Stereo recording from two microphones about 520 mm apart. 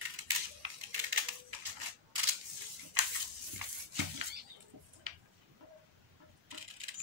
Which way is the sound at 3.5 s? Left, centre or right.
Right.